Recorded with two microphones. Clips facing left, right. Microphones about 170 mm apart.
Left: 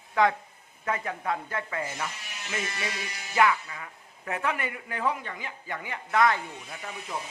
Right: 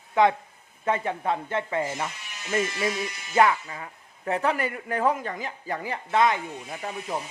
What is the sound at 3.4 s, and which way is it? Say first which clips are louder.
Speech: right 3 dB; 35° right (ahead or behind).